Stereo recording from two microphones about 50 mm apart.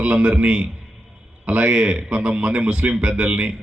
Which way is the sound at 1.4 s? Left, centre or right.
Right.